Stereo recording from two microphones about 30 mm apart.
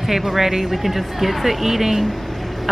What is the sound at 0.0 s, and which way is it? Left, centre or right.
A woman's voice, centre.